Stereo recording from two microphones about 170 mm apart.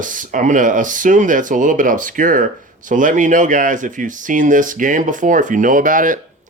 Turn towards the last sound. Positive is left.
turn(degrees=-50)  # may be behind; listen again after turning